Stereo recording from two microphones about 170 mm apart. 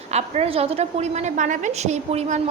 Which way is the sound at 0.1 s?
40° right (ahead or behind).